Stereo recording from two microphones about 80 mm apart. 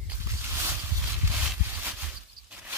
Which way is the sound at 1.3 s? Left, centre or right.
Right.